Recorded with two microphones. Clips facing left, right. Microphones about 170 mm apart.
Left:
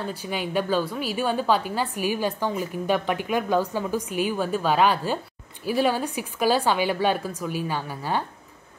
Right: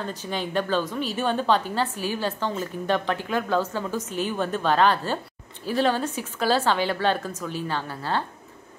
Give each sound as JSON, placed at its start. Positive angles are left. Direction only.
{"t": 0.0, "sound": "a woman's voice", "side_deg": 10}